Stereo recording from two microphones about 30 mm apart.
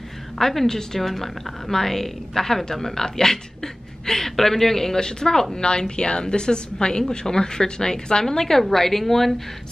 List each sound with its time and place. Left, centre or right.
0.4 s a woman's voice: centre